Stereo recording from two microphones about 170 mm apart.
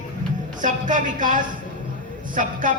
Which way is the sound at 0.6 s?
50° right (ahead or behind).